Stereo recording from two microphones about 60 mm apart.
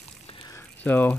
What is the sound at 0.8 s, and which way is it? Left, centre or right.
Speech, left.